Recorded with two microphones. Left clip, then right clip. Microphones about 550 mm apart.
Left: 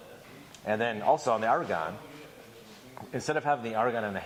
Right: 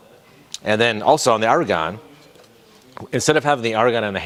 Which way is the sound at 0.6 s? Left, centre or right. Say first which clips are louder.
Right 11 dB; right.